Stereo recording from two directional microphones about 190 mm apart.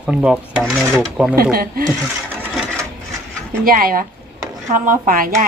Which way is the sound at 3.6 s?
50° right (ahead or behind).